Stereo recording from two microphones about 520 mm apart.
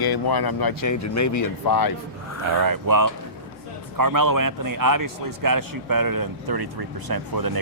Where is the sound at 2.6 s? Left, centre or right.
Right.